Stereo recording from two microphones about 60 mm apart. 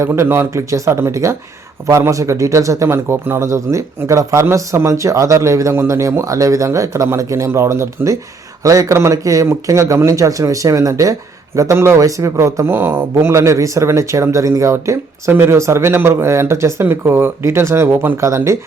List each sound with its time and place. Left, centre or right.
0.0 s speech: right
3.4 s speech: right
8.6 s a man's voice: right
9.5 s speech: right
12.6 s speech: right